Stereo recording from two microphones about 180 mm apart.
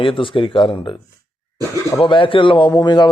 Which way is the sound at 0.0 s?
30° left (ahead or behind).